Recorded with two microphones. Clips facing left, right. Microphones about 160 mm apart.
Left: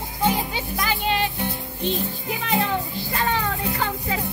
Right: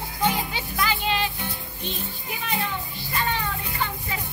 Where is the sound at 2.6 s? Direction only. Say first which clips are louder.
Left 6 dB; 60° left (ahead or behind); by 4.1 s 80° left.